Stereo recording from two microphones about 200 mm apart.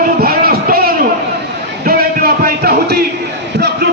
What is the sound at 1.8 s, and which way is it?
Music, 45° right (ahead or behind).